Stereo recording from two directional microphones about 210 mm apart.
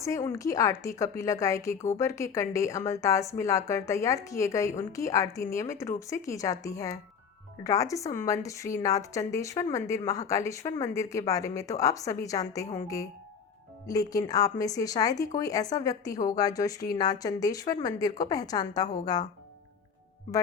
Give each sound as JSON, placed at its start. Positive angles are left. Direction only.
{"t": 0.0, "sound": "a woman's voice", "side_deg": 15}
{"t": 13.8, "sound": "a woman's voice", "side_deg": 15}